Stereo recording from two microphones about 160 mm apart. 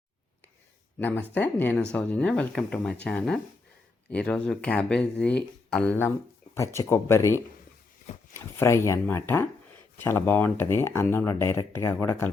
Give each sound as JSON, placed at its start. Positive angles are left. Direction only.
{"t": 0.9, "sound": "speech", "side_deg": 10}